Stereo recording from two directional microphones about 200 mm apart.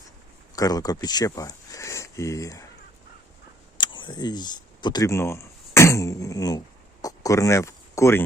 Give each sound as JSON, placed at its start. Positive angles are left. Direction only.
{"t": 0.5, "sound": "speech", "side_deg": 20}
{"t": 3.8, "sound": "speech", "side_deg": 25}
{"t": 7.0, "sound": "a sound", "side_deg": 15}